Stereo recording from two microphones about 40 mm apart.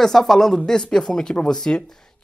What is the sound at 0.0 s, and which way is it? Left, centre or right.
Speech, centre.